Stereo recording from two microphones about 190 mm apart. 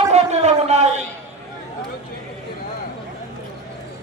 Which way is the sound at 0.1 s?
35° right (ahead or behind).